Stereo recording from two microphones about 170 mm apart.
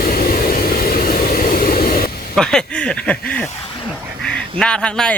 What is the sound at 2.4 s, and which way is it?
Speech, 5° left (ahead or behind).